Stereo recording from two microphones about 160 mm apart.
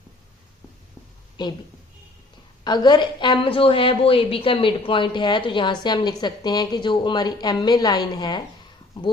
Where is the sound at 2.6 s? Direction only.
25° left (ahead or behind).